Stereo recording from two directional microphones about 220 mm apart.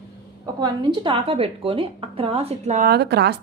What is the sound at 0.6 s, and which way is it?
A woman's voice, 20° right (ahead or behind).